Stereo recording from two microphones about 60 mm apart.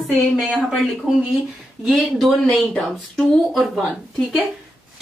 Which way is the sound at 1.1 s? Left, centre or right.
Centre.